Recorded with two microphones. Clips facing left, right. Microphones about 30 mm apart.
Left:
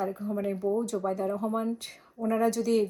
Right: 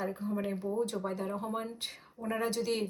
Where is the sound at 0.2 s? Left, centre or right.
Right.